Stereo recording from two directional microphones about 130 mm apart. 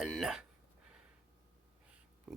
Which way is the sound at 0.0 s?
Centre (ahead or behind).